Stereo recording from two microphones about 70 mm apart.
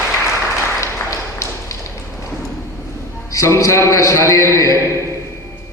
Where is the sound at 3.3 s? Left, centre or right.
Left.